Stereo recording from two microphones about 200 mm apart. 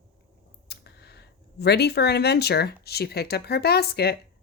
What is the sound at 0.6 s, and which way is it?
Speech, 55° left (ahead or behind).